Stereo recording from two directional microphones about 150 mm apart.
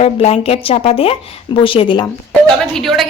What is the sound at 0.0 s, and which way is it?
Speech, 45° left (ahead or behind).